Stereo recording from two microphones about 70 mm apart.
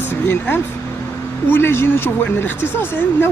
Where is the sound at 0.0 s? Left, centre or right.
Left.